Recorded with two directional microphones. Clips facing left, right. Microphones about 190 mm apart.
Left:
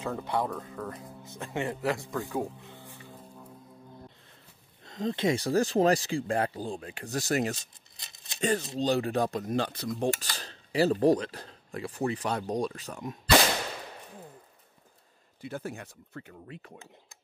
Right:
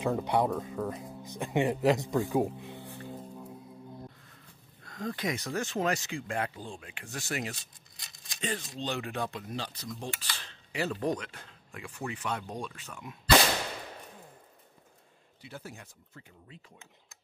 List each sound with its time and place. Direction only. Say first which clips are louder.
0.0 s speech: right 3 dB; 15° right (ahead or behind)
4.8 s speech: left 6 dB; 20° left (ahead or behind); by 7.5 s 40° left (ahead or behind)
8.0 s a sound: left 2 dB; 25° left (ahead or behind)
8.4 s speech: left 8 dB; 40° left (ahead or behind); by 10.1 s 60° left (ahead or behind)
10.1 s speech: left 3 dB; 40° left (ahead or behind)
15.4 s speech: left 8 dB; 50° left (ahead or behind)